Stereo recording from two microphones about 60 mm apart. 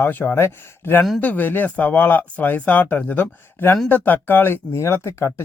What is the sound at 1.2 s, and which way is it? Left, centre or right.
Speech, left.